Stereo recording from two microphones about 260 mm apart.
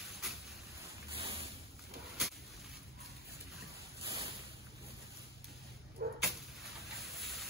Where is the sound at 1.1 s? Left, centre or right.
Right.